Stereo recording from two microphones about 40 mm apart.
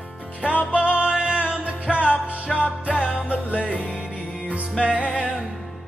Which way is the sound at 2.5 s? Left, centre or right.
Centre.